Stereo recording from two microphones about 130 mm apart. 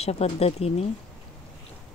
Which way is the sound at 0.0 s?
50° left (ahead or behind).